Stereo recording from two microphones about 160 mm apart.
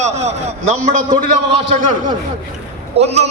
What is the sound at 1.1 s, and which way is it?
Speech, 35° right (ahead or behind).